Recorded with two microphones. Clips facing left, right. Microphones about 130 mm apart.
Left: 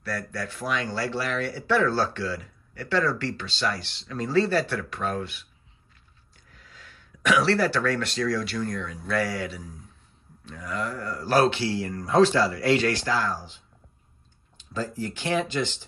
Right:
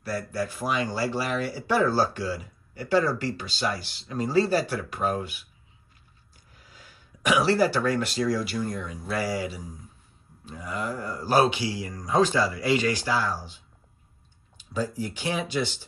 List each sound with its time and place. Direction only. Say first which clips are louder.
0.0 s speech: right 3 dB; 5° right (ahead or behind)
7.2 s speech: even; 5° right (ahead or behind)
11.8 s a man's voice: left 4 dB; 65° left (ahead or behind)
12.1 s speech: left 3 dB; 5° right (ahead or behind)
14.7 s speech: right 1 dB; 10° right (ahead or behind)